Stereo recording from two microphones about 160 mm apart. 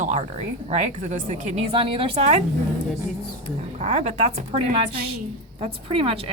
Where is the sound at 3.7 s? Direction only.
45° right (ahead or behind).